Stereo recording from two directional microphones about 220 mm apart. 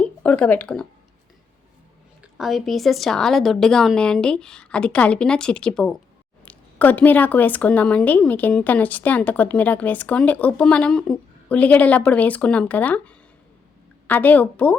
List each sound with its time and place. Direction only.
0.0 s speech: 5° left (ahead or behind)
2.2 s a woman's voice: centre (ahead or behind)